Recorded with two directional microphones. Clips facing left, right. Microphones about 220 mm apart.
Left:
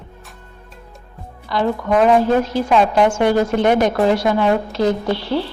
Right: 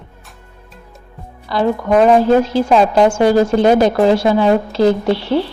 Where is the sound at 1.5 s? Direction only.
35° right (ahead or behind).